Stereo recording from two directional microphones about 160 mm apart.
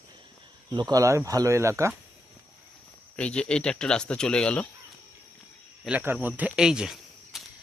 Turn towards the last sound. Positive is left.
turn(degrees=-5)  # may be behind; listen again after turning